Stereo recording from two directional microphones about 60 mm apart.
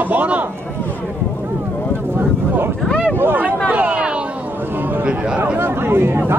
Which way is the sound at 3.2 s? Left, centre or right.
Right.